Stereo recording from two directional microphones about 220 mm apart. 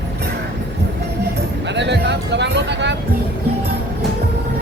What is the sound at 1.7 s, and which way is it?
Music, 50° right (ahead or behind).